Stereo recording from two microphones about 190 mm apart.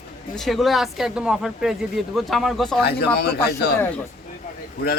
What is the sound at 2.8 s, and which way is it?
Speech, 60° left (ahead or behind).